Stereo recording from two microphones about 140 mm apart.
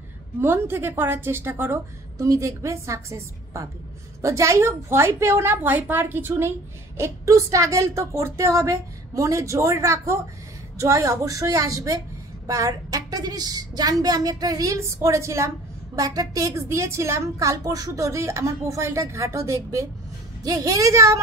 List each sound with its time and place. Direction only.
0.4 s a woman's voice: 15° right (ahead or behind)